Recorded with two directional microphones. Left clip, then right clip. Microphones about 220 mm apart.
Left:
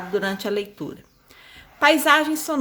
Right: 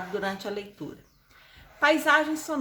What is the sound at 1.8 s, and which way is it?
Speech, 40° left (ahead or behind).